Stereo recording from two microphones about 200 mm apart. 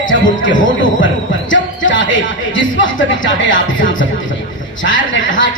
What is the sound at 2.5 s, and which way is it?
Speech, 70° left (ahead or behind).